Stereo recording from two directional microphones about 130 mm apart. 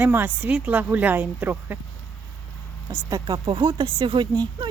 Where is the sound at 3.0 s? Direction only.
30° right (ahead or behind).